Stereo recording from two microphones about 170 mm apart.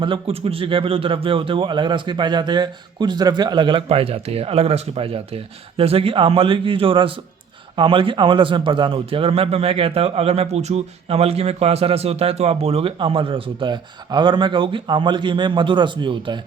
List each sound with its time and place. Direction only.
0.0 s a man's voice: 30° right (ahead or behind)